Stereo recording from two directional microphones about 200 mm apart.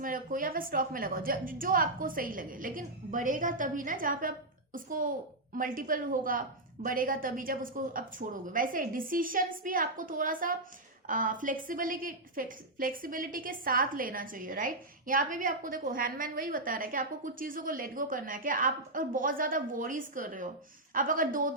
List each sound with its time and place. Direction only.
0.0 s a woman's voice: 45° right (ahead or behind)